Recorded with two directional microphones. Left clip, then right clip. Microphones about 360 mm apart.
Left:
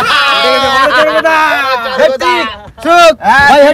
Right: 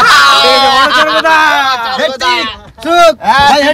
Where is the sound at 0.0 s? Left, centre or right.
Centre.